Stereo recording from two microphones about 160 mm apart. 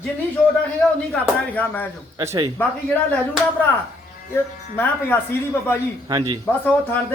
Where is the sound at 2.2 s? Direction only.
25° right (ahead or behind).